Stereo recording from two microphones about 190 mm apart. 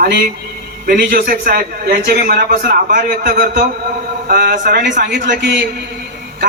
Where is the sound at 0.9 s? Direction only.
50° right (ahead or behind).